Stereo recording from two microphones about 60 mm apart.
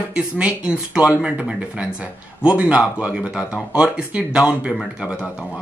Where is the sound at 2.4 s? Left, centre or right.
Centre.